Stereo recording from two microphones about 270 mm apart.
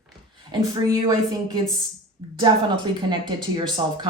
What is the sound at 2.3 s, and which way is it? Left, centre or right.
Speech, centre.